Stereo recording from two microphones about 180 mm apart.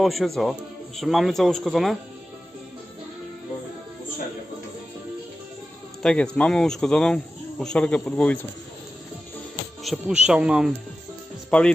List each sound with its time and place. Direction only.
0.0 s speech: centre (ahead or behind)
6.0 s speech: 5° left (ahead or behind)
9.8 s speech: centre (ahead or behind)
11.5 s speech: 5° left (ahead or behind)